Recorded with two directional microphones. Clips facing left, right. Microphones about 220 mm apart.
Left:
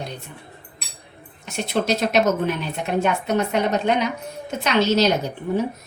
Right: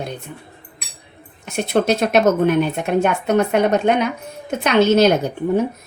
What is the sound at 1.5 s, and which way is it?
A woman's voice, 55° right (ahead or behind).